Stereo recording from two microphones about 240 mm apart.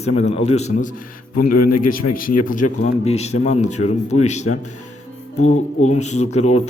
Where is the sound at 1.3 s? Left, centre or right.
Left.